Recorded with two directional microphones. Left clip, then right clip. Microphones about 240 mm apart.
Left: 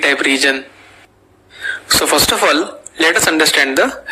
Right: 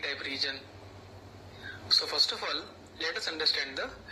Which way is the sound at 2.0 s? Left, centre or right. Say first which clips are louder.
Left 18 dB; left.